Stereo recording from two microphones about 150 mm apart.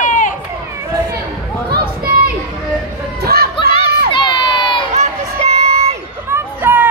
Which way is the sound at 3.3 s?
90° right.